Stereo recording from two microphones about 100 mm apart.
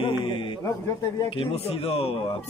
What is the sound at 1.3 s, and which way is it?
Speech, 70° left (ahead or behind).